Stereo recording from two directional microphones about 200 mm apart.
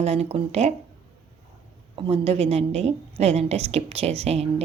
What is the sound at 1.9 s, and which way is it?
A woman's voice, 25° right (ahead or behind).